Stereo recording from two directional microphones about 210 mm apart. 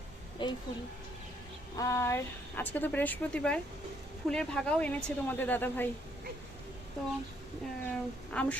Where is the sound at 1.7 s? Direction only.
15° left (ahead or behind).